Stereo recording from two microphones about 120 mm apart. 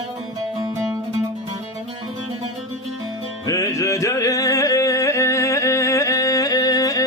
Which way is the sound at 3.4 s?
30° left (ahead or behind).